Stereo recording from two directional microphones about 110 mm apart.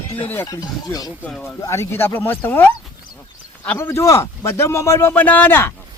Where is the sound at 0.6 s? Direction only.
35° left (ahead or behind); by 2.7 s 20° left (ahead or behind).